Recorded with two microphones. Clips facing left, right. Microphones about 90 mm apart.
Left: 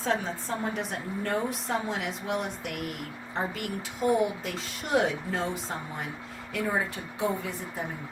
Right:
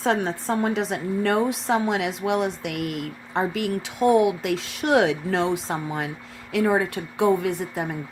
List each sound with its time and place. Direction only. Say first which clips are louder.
0.0 s a woman's voice: right 6 dB; 80° right
6.5 s speech: right 8 dB; 80° right